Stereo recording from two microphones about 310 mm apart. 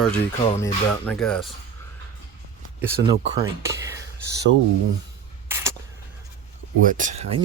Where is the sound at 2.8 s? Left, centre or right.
Centre.